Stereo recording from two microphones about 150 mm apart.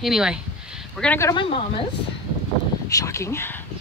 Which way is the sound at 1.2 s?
30° left (ahead or behind).